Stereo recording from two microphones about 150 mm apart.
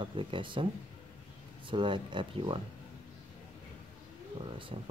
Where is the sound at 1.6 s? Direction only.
30° right (ahead or behind).